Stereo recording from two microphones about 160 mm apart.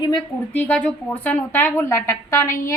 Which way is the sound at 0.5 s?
10° left (ahead or behind).